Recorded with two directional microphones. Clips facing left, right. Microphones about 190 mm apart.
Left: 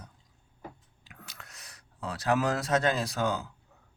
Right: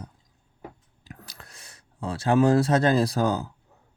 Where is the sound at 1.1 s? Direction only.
35° right (ahead or behind).